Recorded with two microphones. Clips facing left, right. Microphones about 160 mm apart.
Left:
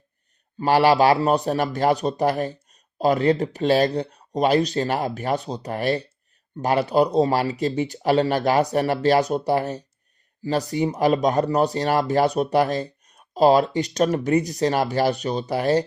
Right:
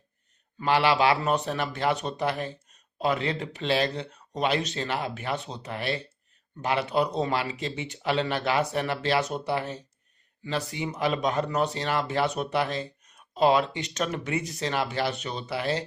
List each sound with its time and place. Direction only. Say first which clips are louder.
0.6 s speech: left 6 dB; 40° left (ahead or behind)